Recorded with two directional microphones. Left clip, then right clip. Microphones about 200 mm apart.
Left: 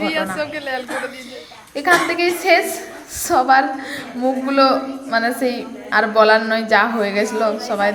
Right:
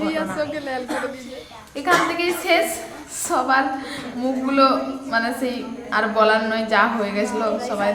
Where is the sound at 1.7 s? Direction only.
25° left (ahead or behind).